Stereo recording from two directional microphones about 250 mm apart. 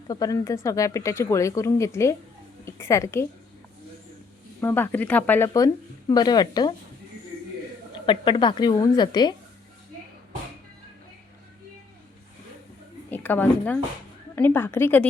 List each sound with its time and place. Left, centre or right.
0.1 s a woman's voice: centre
4.6 s speech: centre
8.0 s a woman's voice: centre
13.1 s a woman's voice: centre